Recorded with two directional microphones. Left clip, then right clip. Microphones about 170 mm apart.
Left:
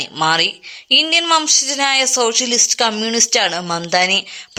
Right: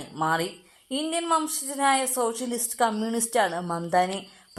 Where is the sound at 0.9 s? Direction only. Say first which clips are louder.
Left 13 dB; 15° left (ahead or behind).